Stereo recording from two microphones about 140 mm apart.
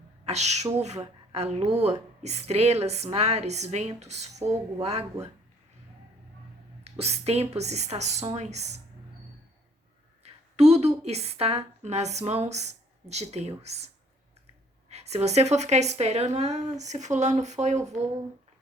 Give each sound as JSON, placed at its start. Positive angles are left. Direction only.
{"t": 0.3, "sound": "a woman's voice", "side_deg": -50}
{"t": 7.0, "sound": "a woman's voice", "side_deg": -50}
{"t": 10.2, "sound": "a woman's voice", "side_deg": -50}